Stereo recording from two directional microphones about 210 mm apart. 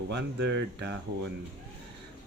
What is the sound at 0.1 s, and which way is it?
Speech, 55° right (ahead or behind).